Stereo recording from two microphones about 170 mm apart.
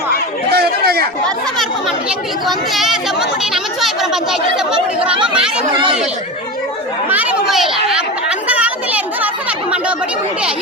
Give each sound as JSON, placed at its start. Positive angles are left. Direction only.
{"t": 0.5, "sound": "a sound", "side_deg": -70}
{"t": 2.0, "sound": "speech", "side_deg": 0}
{"t": 5.7, "sound": "speech", "side_deg": -30}
{"t": 7.1, "sound": "chatter", "side_deg": -5}